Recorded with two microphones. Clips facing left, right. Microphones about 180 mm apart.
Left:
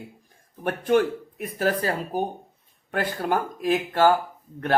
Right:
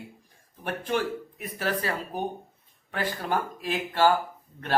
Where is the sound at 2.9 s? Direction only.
50° left (ahead or behind).